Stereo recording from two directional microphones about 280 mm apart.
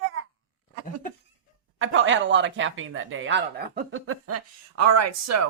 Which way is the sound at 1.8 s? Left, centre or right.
Right.